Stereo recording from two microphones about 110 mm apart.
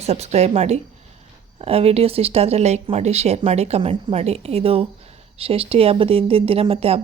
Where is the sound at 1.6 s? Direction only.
65° right (ahead or behind).